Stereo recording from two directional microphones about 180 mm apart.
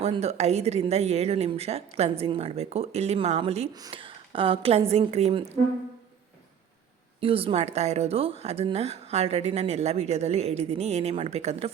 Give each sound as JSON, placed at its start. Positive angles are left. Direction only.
{"t": 0.0, "sound": "speech", "side_deg": -35}
{"t": 3.8, "sound": "speech", "side_deg": -25}
{"t": 7.2, "sound": "speech", "side_deg": -30}